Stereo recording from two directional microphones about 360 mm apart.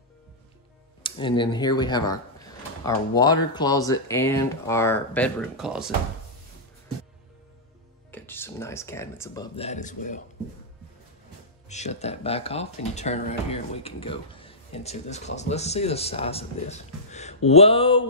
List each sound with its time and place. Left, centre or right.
1.0 s speech: centre
8.1 s speech: centre
11.7 s speech: centre